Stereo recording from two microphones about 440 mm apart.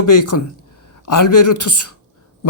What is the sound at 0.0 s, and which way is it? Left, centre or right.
A man's voice, left.